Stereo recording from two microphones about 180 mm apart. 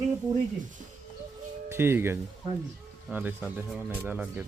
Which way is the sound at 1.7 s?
15° right (ahead or behind).